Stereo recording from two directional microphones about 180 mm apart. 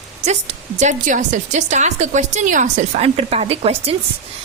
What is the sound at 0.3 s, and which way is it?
A woman's voice, 40° right (ahead or behind).